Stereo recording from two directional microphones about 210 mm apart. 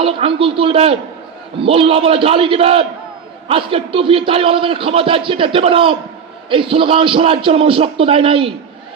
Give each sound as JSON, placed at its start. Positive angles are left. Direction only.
{"t": 0.0, "sound": "a man's voice", "side_deg": -25}